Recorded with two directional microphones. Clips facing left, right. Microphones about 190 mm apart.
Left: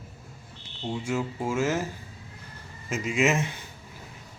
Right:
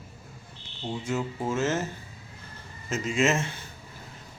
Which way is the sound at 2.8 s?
10° left (ahead or behind).